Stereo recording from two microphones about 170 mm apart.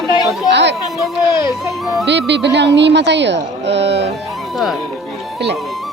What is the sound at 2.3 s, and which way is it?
Speech, 90° right.